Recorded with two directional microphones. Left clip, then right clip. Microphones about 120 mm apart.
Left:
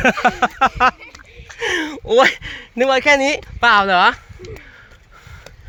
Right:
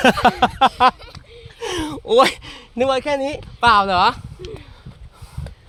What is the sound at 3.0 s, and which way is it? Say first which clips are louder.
Speech: left 8 dB; 30° left (ahead or behind).